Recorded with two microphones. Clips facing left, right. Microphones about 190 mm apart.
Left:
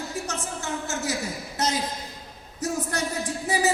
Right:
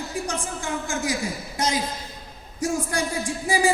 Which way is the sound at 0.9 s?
15° right (ahead or behind).